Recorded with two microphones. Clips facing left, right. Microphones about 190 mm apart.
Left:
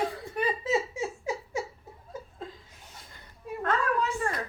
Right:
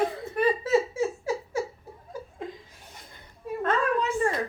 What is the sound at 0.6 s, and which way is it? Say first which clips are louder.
Laughter: right 5 dB; 15° left (ahead or behind).